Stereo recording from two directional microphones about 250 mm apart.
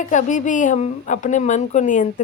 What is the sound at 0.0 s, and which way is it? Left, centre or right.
A woman's voice, left.